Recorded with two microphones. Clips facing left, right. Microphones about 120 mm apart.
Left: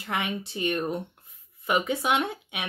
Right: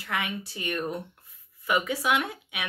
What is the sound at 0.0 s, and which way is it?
Speech, 20° left (ahead or behind).